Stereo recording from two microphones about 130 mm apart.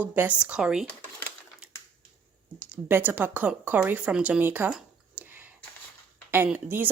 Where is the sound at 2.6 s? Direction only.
15° right (ahead or behind).